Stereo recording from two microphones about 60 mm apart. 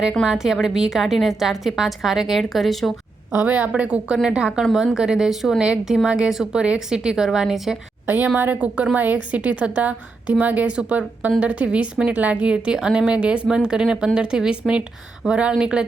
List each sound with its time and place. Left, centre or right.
0.3 s a woman's voice: centre
3.4 s a woman's voice: right
3.7 s a woman's voice: centre
5.6 s a woman's voice: centre
8.0 s a woman's voice: right; by 15.9 s centre